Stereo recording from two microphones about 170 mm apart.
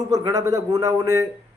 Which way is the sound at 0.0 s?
20° right (ahead or behind).